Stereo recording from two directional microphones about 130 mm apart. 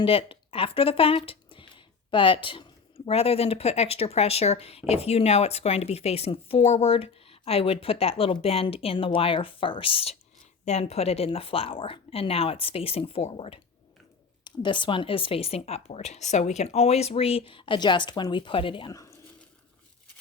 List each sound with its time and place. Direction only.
0.0 s speech: 45° left (ahead or behind)
14.4 s speech: 40° left (ahead or behind)